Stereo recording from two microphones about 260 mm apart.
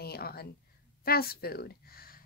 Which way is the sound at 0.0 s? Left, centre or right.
Left.